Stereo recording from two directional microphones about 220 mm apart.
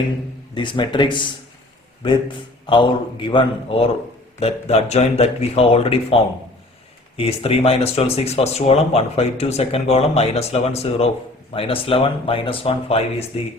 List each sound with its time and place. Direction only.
0.5 s speech: 20° left (ahead or behind)
2.6 s speech: 20° left (ahead or behind)
7.2 s speech: 25° left (ahead or behind)